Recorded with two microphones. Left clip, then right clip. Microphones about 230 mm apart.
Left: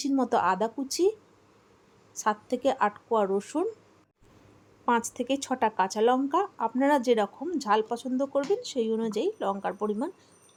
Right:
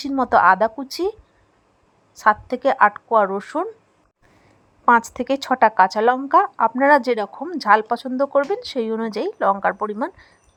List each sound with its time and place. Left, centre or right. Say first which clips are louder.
0.0 s speech: right 10 dB; centre
2.1 s speech: right 11 dB; centre
4.9 s speech: right 10 dB; centre